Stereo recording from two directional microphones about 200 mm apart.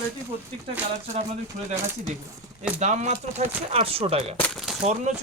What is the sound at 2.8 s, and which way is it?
Speech, 35° right (ahead or behind).